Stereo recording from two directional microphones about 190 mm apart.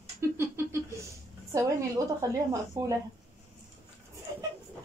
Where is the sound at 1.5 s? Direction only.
15° right (ahead or behind).